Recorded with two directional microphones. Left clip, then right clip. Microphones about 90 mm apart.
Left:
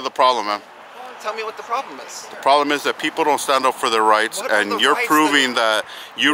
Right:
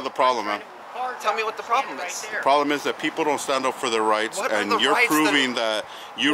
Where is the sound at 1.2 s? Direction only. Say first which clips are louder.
Even; centre (ahead or behind).